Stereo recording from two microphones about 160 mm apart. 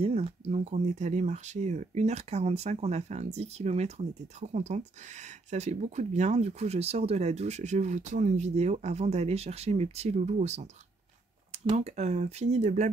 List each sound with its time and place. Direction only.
0.0 s speech: 40° right (ahead or behind)
11.7 s speech: 45° right (ahead or behind)